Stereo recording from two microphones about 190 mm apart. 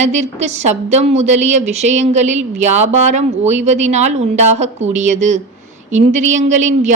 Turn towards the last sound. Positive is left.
turn(degrees=-40)  # may be behind; listen again after turning